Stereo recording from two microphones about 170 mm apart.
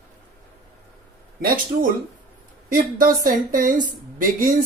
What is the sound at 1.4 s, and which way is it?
Speech, 55° right (ahead or behind).